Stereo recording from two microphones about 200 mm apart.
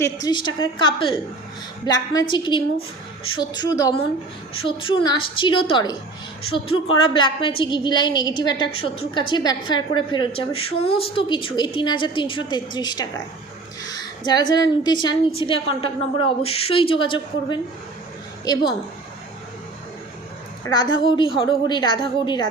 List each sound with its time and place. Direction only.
0.0 s a woman's voice: 20° left (ahead or behind)
13.8 s a sound: 20° left (ahead or behind)
14.5 s a woman's voice: 20° left (ahead or behind)
20.7 s a woman's voice: 20° left (ahead or behind)